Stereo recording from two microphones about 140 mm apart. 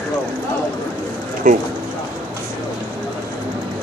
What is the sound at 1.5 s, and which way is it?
Speech, 70° right (ahead or behind).